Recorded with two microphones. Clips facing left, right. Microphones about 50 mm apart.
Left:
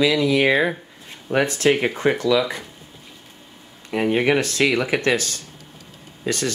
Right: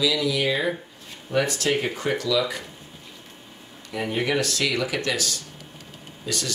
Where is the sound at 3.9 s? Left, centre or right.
Left.